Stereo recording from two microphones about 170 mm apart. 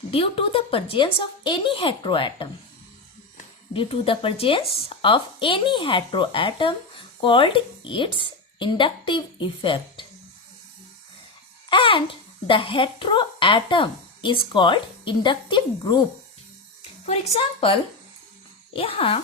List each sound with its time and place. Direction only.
0.1 s a woman's voice: 35° left (ahead or behind)
3.7 s a woman's voice: 30° left (ahead or behind)
11.7 s speech: 30° left (ahead or behind)
17.1 s a woman's voice: 35° left (ahead or behind)